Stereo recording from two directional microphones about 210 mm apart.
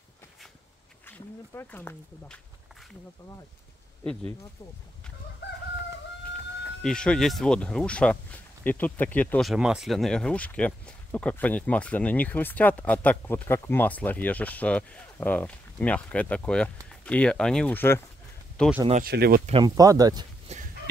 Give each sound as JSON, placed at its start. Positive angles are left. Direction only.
{"t": 1.0, "sound": "speech", "side_deg": 10}
{"t": 6.6, "sound": "speech", "side_deg": 5}
{"t": 19.0, "sound": "speech", "side_deg": -45}
{"t": 19.4, "sound": "speech", "side_deg": -20}
{"t": 20.5, "sound": "a sound", "side_deg": -30}